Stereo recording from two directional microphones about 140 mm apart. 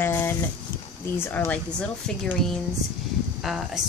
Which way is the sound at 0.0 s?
15° left (ahead or behind).